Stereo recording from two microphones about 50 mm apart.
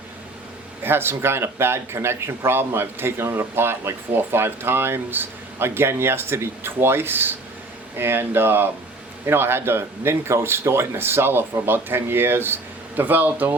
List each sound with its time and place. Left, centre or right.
0.9 s speech: right
13.0 s speech: right